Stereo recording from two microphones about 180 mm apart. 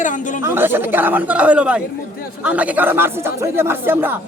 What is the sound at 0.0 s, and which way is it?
Speech, 45° left (ahead or behind).